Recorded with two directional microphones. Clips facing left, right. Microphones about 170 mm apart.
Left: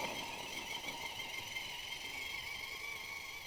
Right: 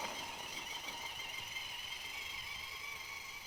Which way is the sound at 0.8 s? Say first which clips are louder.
Left 2 dB; 25° left (ahead or behind).